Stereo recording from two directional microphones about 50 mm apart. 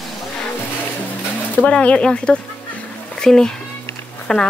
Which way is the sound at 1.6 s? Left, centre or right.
Centre.